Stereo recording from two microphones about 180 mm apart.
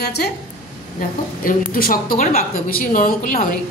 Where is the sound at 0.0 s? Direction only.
60° left (ahead or behind).